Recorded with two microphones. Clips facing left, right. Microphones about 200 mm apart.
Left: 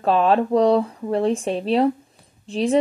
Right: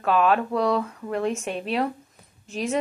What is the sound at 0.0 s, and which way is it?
Speech, 35° left (ahead or behind).